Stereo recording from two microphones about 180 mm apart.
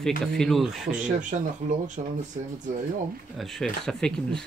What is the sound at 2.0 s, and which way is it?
Speech, 40° right (ahead or behind).